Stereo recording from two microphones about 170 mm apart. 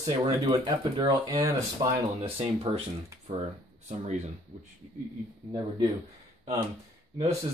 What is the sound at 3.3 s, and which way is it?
Speech, 40° right (ahead or behind).